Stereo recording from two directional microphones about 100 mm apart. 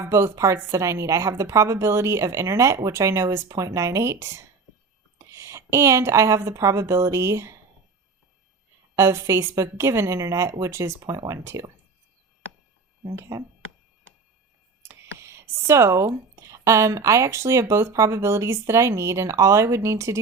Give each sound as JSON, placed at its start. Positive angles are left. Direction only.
{"t": 0.0, "sound": "a woman's voice", "side_deg": -30}
{"t": 9.0, "sound": "speech", "side_deg": -30}
{"t": 11.0, "sound": "a woman's voice", "side_deg": -40}
{"t": 13.1, "sound": "a woman's voice", "side_deg": -30}
{"t": 14.8, "sound": "speech", "side_deg": -25}